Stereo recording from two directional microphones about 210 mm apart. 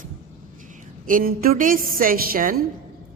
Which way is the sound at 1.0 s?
40° right (ahead or behind).